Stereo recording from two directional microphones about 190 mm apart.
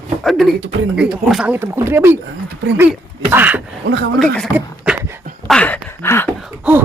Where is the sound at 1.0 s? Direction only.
5° right (ahead or behind).